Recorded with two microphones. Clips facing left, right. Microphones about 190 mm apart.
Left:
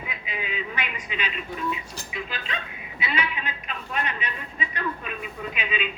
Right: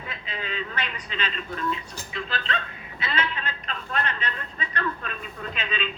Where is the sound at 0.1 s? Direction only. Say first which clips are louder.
Right 1 dB; 10° left (ahead or behind).